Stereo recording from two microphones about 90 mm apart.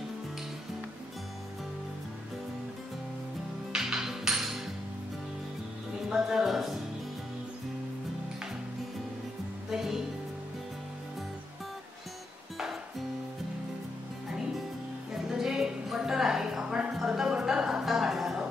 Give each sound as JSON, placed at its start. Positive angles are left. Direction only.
{"t": 3.7, "sound": "music", "side_deg": -5}
{"t": 6.0, "sound": "music", "side_deg": -5}
{"t": 9.7, "sound": "music", "side_deg": -5}
{"t": 15.2, "sound": "music", "side_deg": -5}